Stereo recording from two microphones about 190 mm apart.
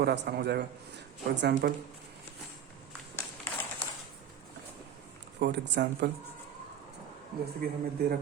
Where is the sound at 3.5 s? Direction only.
10° left (ahead or behind).